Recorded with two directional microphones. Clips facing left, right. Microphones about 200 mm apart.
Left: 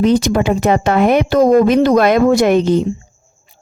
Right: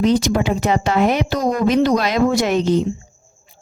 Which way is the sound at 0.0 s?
55° left (ahead or behind).